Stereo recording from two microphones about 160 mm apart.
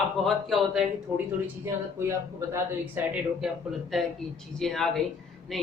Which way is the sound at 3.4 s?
Centre (ahead or behind).